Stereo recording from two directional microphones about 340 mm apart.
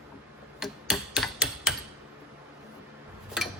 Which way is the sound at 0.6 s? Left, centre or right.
Centre.